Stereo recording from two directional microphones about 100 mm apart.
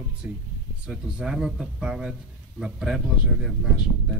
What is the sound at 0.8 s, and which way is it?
Speech, 10° right (ahead or behind).